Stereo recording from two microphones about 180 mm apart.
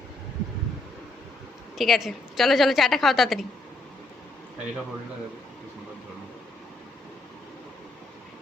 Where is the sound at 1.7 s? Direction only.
Centre (ahead or behind).